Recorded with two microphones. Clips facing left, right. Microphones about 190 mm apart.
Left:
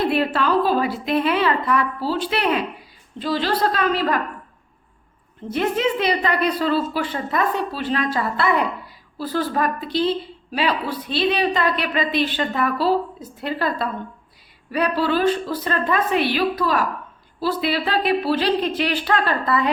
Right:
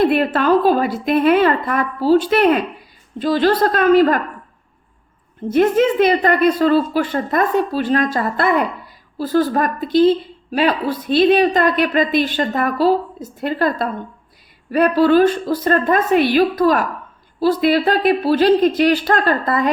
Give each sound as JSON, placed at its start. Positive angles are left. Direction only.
{"t": 0.3, "sound": "a woman's voice", "side_deg": -50}
{"t": 5.5, "sound": "a woman's voice", "side_deg": -50}